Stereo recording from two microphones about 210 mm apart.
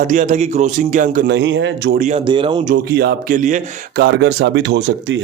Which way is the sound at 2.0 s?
35° right (ahead or behind).